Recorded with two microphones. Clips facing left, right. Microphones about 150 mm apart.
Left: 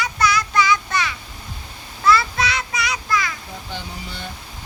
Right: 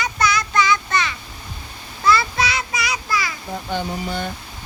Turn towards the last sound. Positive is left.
turn(degrees=-50)  # may be behind; listen again after turning